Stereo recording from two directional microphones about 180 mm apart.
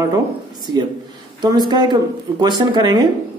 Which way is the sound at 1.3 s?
20° right (ahead or behind).